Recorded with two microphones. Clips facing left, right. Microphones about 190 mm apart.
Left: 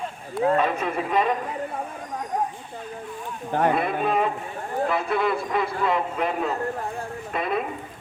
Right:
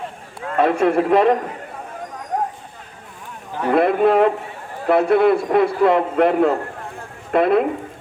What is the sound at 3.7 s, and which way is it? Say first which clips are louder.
A man's voice: right 9 dB; 60° right (ahead or behind).